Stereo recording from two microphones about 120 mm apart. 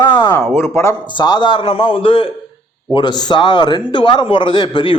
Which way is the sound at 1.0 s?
40° left (ahead or behind).